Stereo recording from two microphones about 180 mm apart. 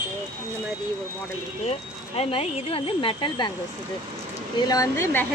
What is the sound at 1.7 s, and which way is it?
Speech, 35° left (ahead or behind).